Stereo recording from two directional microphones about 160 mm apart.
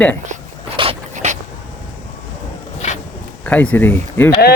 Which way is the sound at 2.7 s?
45° left (ahead or behind).